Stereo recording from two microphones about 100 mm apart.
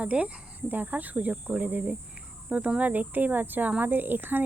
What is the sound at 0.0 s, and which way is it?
Speech, 15° right (ahead or behind).